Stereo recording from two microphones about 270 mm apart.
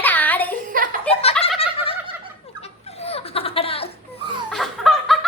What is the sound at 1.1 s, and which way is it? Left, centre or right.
Giggle, left.